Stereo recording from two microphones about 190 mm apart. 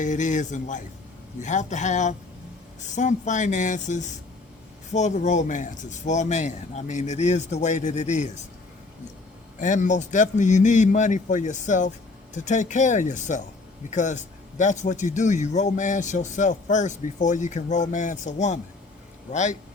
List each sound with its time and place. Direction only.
0.0 s a man's voice: 40° left (ahead or behind)
9.6 s a man's voice: 40° left (ahead or behind)